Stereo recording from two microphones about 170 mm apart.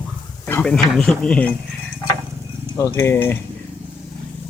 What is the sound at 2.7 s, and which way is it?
Speech, 15° left (ahead or behind).